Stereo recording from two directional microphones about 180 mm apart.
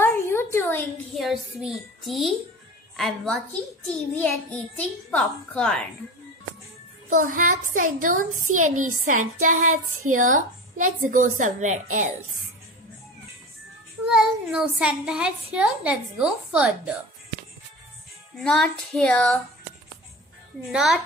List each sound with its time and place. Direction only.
0.0 s a sound: 15° left (ahead or behind)
1.1 s a child's voice: centre (ahead or behind)
7.1 s a woman's voice: 45° right (ahead or behind)
14.0 s a woman's voice: 5° right (ahead or behind)
18.4 s a woman's voice: 5° left (ahead or behind)
20.7 s a woman's voice: 5° right (ahead or behind)